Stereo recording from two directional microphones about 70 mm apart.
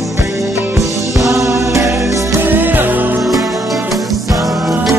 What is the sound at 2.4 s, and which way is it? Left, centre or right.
Music, right.